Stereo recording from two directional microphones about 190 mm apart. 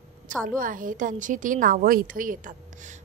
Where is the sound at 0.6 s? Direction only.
45° right (ahead or behind).